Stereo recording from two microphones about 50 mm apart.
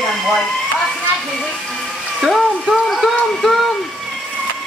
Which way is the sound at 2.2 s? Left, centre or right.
Centre.